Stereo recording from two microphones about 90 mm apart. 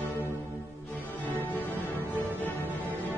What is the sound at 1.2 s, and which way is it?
Music, 20° left (ahead or behind).